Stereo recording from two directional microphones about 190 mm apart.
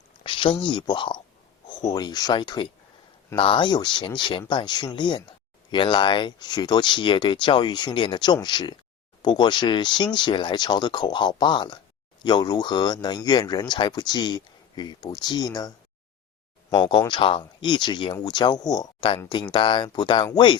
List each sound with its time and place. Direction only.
0.2 s speech: 25° left (ahead or behind)